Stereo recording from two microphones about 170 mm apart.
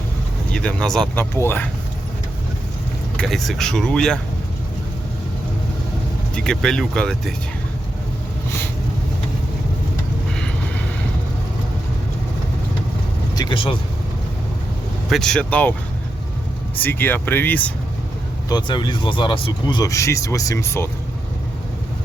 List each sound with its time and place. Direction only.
0.5 s speech: 5° left (ahead or behind)
3.2 s speech: centre (ahead or behind)
6.3 s speech: 5° left (ahead or behind)
13.3 s speech: 25° left (ahead or behind)
15.1 s speech: 5° left (ahead or behind)
16.7 s speech: 10° left (ahead or behind)
18.4 s speech: 25° left (ahead or behind)